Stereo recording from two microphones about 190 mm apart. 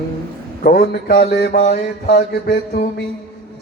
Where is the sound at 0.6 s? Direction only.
55° left (ahead or behind).